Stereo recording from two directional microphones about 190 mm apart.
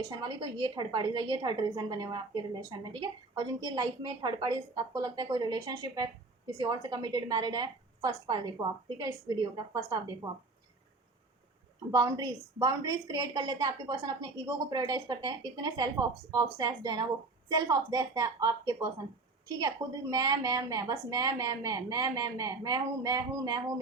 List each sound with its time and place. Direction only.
0.1 s a woman's voice: 20° right (ahead or behind)
11.9 s a woman's voice: 20° right (ahead or behind)